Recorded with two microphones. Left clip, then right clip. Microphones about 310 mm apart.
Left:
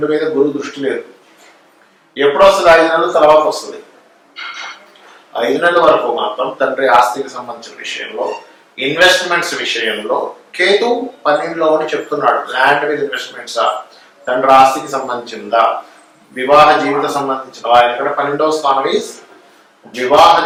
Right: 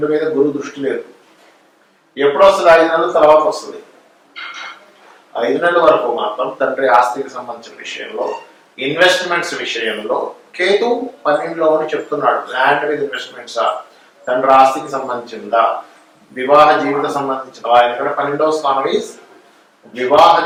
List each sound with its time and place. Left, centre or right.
0.0 s speech: centre
2.1 s a man's voice: centre
3.1 s speech: right
5.4 s speech: centre
6.1 s speech: right
6.6 s speech: centre
7.8 s speech: centre
10.1 s speech: centre
10.5 s speech: centre
15.3 s speech: centre
16.6 s speech: centre
20.1 s speech: centre